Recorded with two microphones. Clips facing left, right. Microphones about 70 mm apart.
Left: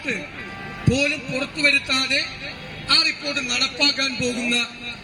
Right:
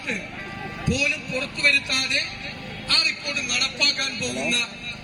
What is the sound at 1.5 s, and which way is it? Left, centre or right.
A man's voice, left.